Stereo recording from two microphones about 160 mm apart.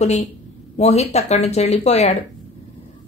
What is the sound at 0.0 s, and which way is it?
Speech, 45° left (ahead or behind).